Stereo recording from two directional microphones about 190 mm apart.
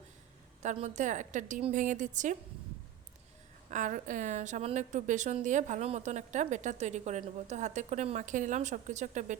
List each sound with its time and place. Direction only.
0.6 s a woman's voice: 40° right (ahead or behind)
3.7 s a woman's voice: 40° right (ahead or behind)